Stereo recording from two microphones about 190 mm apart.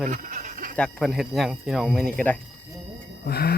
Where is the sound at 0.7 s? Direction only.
5° left (ahead or behind).